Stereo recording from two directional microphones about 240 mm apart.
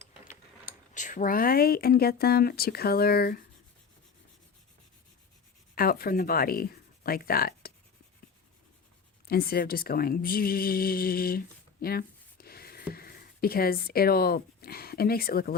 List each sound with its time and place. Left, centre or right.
0.9 s speech: left
5.7 s speech: left
9.2 s speech: left